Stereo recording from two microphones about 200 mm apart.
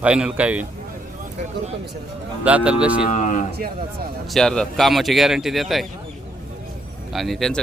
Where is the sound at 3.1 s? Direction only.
40° left (ahead or behind).